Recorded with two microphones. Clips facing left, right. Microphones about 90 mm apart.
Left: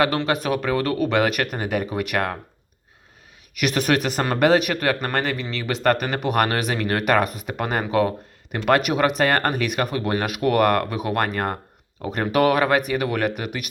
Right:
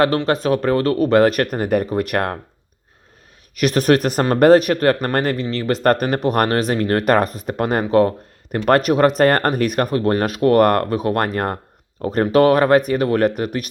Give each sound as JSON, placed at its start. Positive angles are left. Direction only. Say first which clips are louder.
{"t": 0.3, "sound": "speech", "louder": "right 5 dB", "side_deg": -35}
{"t": 3.5, "sound": "speech", "louder": "right 6 dB", "side_deg": -35}